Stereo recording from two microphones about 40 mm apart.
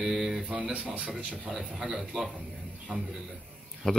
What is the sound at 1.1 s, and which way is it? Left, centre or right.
Speech, right.